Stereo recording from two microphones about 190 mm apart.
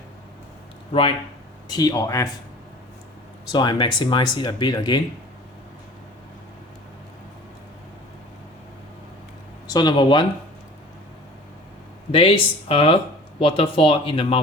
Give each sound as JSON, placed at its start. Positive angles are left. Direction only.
{"t": 1.6, "sound": "speech", "side_deg": 20}
{"t": 3.5, "sound": "speech", "side_deg": 25}
{"t": 9.6, "sound": "speech", "side_deg": 20}
{"t": 12.1, "sound": "speech", "side_deg": 30}